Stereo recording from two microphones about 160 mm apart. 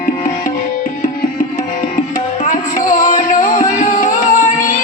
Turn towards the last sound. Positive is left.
turn(degrees=55)  # may be behind; listen again after turning